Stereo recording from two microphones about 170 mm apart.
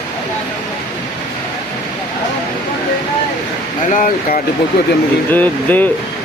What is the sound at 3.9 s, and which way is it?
Speech, 50° left (ahead or behind).